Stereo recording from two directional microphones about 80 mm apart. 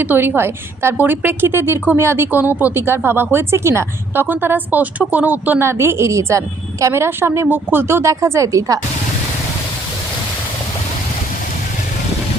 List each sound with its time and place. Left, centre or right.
0.0 s speech: right
5.6 s a woman's voice: right